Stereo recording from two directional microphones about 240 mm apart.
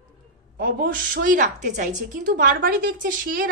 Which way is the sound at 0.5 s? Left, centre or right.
Right.